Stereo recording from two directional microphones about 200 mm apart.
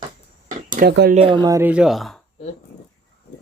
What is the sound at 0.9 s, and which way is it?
Speech, 55° right (ahead or behind).